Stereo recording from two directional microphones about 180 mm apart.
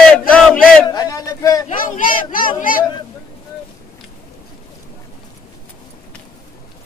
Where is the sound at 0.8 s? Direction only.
20° left (ahead or behind).